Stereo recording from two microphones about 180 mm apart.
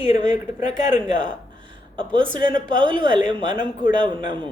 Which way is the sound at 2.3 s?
25° right (ahead or behind).